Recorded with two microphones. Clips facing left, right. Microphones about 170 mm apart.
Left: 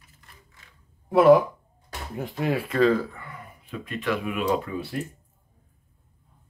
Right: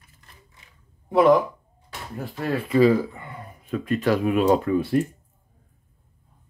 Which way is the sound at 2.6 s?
5° right (ahead or behind).